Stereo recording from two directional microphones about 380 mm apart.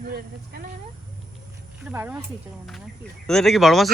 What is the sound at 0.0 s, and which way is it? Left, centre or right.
Speech, right.